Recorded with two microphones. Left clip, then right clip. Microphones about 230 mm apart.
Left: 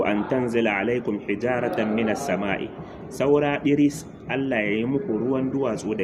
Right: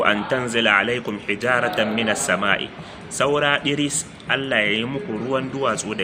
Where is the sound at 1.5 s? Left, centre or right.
Right.